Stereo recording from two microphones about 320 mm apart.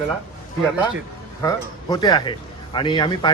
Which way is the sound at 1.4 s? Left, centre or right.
Centre.